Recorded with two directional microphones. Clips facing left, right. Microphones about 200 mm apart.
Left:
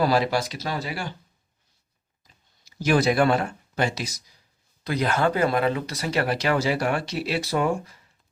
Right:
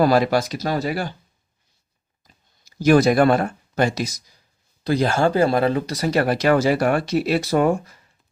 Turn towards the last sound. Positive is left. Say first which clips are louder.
# right 6 dB
turn(degrees=-45)  # may be behind; listen again after turning